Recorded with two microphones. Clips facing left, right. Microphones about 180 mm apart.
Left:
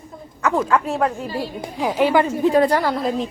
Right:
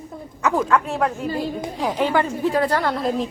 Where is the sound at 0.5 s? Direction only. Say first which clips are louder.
Left 1 dB; centre (ahead or behind); by 2.8 s 20° left (ahead or behind).